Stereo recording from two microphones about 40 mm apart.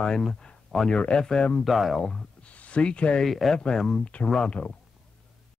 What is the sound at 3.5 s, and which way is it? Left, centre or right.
Speech, centre.